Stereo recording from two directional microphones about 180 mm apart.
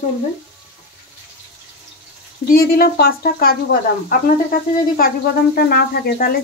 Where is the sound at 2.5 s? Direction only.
55° left (ahead or behind).